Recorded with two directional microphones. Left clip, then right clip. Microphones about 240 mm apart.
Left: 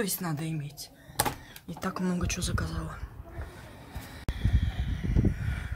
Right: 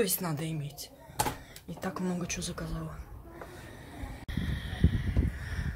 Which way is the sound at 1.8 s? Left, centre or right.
Centre.